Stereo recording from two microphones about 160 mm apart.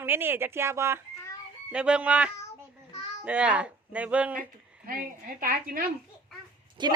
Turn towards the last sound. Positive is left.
turn(degrees=-30)  # may be behind; listen again after turning